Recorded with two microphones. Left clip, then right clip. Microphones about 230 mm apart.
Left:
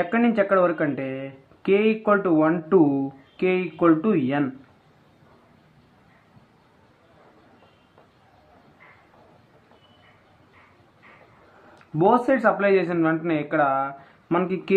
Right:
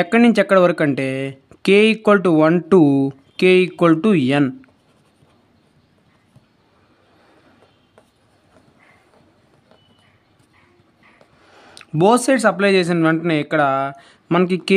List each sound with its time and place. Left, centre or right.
0.0 s speech: right
12.0 s speech: right